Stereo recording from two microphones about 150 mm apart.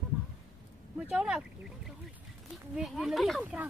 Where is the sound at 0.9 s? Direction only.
5° right (ahead or behind).